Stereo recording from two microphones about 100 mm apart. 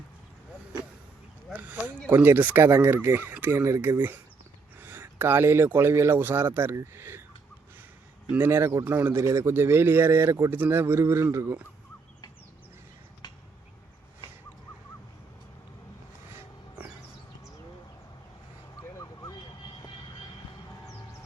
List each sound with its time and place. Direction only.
1.5 s a man's voice: 15° right (ahead or behind)
4.8 s a sound: 20° right (ahead or behind)
5.1 s a man's voice: 20° right (ahead or behind)
8.3 s a man's voice: 25° right (ahead or behind)
13.2 s finger snapping: 45° left (ahead or behind)
18.8 s vehicle: 35° left (ahead or behind)